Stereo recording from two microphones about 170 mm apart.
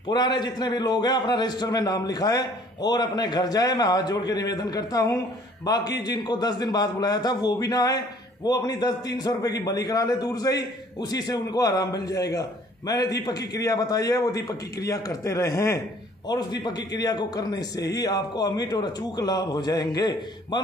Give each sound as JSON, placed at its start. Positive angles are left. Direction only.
{"t": 0.1, "sound": "a man's voice", "side_deg": 25}